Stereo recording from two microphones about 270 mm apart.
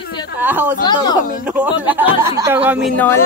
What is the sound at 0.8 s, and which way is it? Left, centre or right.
Speech, centre.